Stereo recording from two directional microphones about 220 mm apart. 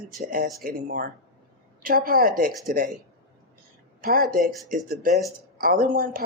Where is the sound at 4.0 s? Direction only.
40° right (ahead or behind).